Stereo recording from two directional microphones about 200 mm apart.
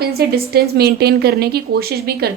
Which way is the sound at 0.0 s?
50° right (ahead or behind).